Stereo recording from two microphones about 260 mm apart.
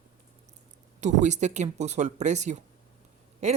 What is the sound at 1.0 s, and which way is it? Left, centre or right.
A woman's voice, right.